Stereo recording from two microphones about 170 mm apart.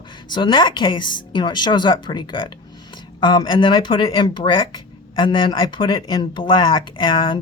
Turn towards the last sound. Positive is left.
turn(degrees=30)  # may be behind; listen again after turning